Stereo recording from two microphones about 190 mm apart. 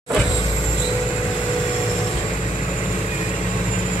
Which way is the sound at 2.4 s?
40° left (ahead or behind).